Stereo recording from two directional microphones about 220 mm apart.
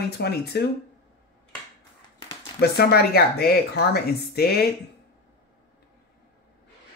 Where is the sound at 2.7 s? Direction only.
45° left (ahead or behind).